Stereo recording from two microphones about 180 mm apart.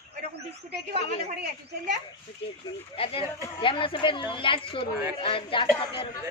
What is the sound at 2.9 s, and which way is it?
Speech, 30° left (ahead or behind).